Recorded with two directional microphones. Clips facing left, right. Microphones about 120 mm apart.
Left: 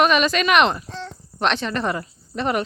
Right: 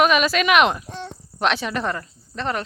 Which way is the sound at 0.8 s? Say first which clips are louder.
Even; 15° right (ahead or behind).